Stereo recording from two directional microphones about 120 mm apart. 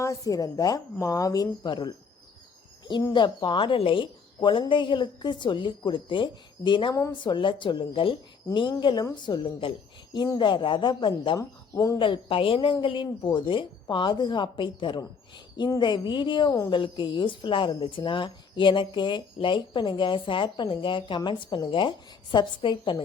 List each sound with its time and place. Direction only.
0.0 s a woman's voice: 30° left (ahead or behind)
3.1 s a woman's voice: 40° left (ahead or behind)
11.3 s speech: 25° left (ahead or behind)
11.9 s a woman's voice: 45° left (ahead or behind)